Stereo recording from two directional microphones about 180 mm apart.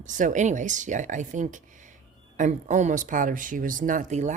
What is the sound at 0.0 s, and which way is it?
Speech, 45° right (ahead or behind).